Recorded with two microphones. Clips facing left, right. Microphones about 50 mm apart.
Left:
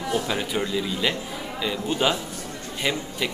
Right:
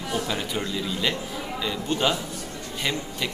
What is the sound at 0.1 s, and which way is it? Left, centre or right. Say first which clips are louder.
A man's voice: left 2 dB; centre.